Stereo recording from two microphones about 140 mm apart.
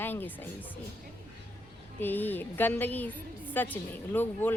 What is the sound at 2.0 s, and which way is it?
Speech, 15° left (ahead or behind).